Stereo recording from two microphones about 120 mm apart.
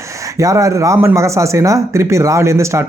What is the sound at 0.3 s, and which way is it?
Speech, 25° right (ahead or behind).